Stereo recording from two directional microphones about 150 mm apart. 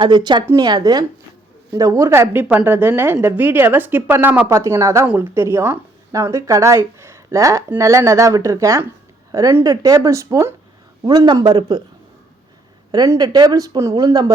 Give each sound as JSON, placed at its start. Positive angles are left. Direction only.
{"t": 0.0, "sound": "a woman's voice", "side_deg": -30}
{"t": 12.9, "sound": "a woman's voice", "side_deg": -25}